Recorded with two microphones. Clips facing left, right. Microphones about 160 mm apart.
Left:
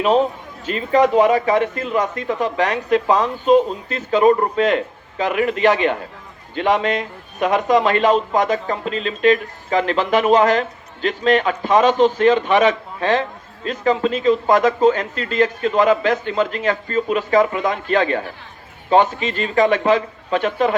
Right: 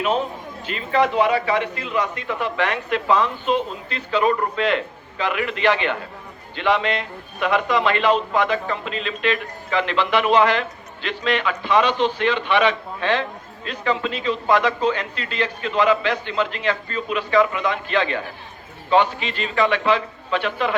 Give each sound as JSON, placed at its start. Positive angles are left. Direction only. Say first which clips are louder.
{"t": 0.6, "sound": "a man's voice", "louder": "left 5 dB", "side_deg": 40}